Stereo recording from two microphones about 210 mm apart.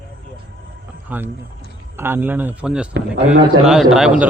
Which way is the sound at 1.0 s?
10° right (ahead or behind).